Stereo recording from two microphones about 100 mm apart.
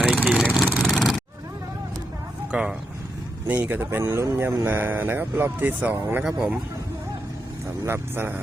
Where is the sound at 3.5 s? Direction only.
20° right (ahead or behind).